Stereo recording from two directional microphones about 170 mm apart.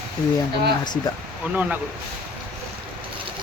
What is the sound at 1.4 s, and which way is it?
Speech, 10° right (ahead or behind).